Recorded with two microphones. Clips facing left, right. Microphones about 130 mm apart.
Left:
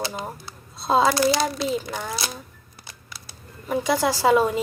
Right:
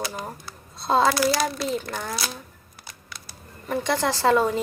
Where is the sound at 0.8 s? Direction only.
5° left (ahead or behind).